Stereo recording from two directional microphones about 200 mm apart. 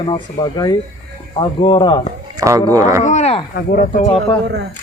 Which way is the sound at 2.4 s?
15° right (ahead or behind).